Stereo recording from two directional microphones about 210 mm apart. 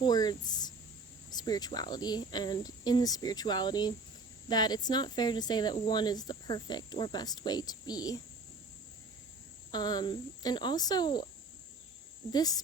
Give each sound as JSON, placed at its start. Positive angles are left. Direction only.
{"t": 0.0, "sound": "speech", "side_deg": 20}
{"t": 9.7, "sound": "speech", "side_deg": 20}
{"t": 12.3, "sound": "a woman's voice", "side_deg": 20}